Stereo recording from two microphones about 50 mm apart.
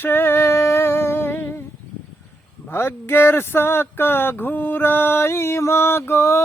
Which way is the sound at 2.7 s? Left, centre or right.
Left.